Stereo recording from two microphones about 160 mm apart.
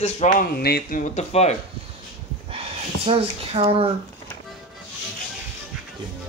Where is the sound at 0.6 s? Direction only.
80° left.